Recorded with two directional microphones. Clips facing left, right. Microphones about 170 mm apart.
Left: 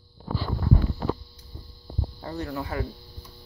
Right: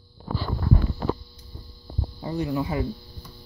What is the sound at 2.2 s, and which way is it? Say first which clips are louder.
Speech: right 6 dB; 15° right (ahead or behind).